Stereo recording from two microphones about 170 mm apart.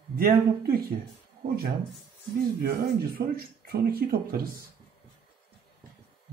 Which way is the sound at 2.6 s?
60° right (ahead or behind).